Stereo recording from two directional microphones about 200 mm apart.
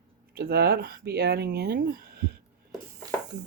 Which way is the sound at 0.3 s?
50° right (ahead or behind).